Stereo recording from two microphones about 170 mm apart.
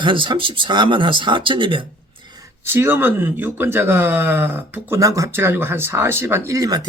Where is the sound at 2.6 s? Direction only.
15° right (ahead or behind).